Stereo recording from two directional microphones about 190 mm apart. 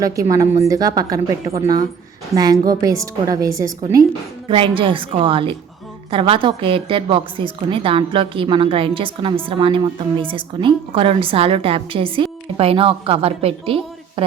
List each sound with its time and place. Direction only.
0.0 s a woman's voice: 20° right (ahead or behind)
4.4 s a woman's voice: 30° right (ahead or behind)